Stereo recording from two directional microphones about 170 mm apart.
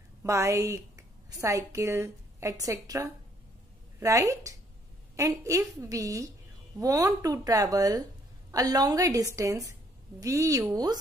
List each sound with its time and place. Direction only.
0.2 s a woman's voice: 15° right (ahead or behind)